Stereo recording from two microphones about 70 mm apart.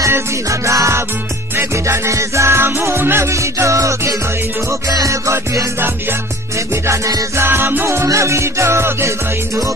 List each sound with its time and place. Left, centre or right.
0.0 s music: right
7.3 s music: right